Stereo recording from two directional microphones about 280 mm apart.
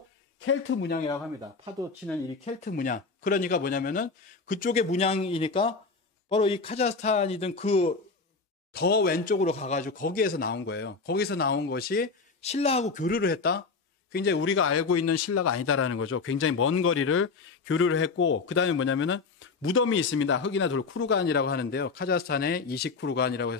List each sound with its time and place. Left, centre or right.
0.5 s speech: left
2.0 s speech: centre
2.4 s speech: left
8.7 s a man's voice: left